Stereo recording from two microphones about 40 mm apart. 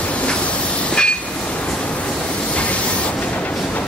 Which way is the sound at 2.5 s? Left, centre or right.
Left.